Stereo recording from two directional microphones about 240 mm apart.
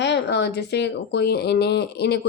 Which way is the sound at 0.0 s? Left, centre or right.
Left.